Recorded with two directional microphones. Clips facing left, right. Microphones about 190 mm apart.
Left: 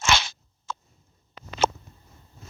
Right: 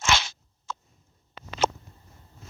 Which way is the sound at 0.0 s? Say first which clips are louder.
Left 1 dB; 70° left (ahead or behind).